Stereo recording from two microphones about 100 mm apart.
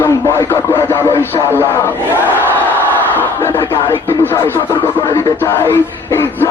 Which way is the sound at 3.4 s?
25° left (ahead or behind).